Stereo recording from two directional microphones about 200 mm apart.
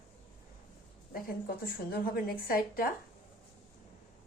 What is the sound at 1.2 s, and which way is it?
A woman's voice, 45° left (ahead or behind).